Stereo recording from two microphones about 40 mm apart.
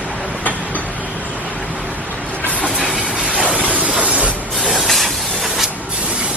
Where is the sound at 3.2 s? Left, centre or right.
Right.